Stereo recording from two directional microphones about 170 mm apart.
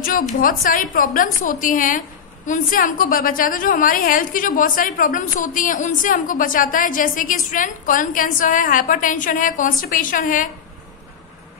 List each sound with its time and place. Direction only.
0.0 s a woman's voice: 55° left (ahead or behind)